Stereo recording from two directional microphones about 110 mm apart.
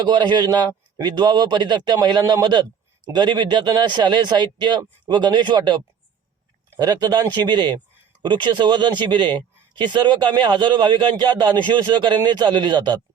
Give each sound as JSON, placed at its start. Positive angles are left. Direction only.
{"t": 0.0, "sound": "a man's voice", "side_deg": -45}